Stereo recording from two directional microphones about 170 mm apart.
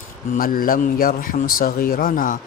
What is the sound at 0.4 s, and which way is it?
Speech, 55° left (ahead or behind).